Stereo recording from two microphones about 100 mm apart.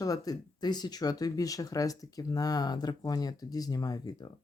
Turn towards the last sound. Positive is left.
turn(degrees=40)  # may be behind; listen again after turning